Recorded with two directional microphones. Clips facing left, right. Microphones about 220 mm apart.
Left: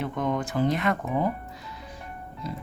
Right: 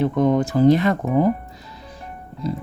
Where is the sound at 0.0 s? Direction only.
35° right (ahead or behind).